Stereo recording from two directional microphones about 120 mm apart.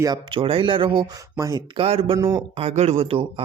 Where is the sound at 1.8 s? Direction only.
55° right (ahead or behind).